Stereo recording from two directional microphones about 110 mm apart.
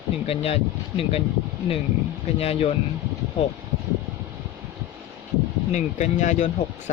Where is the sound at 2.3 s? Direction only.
65° left (ahead or behind).